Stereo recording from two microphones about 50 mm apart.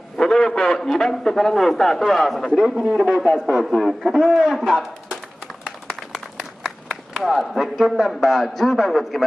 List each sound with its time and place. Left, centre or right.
0.2 s a man's voice: centre
2.8 s speech: centre
3.1 s a man's voice: centre
6.1 s speech: centre